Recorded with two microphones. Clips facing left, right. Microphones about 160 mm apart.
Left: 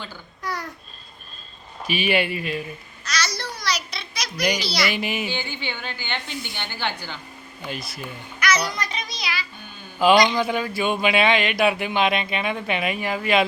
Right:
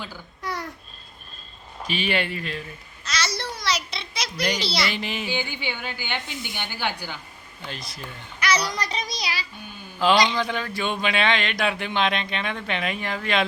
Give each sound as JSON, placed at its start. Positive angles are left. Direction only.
{"t": 1.8, "sound": "speech", "side_deg": 10}
{"t": 3.0, "sound": "a sound", "side_deg": -25}
{"t": 4.6, "sound": "speech", "side_deg": -25}
{"t": 4.9, "sound": "speech", "side_deg": 10}
{"t": 5.3, "sound": "a woman's voice", "side_deg": -10}
{"t": 7.6, "sound": "speech", "side_deg": 10}
{"t": 8.4, "sound": "a sound", "side_deg": -30}
{"t": 8.7, "sound": "music", "side_deg": -35}
{"t": 10.0, "sound": "speech", "side_deg": 10}